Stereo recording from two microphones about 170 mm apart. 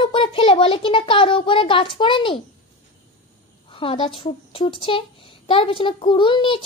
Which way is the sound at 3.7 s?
30° left (ahead or behind).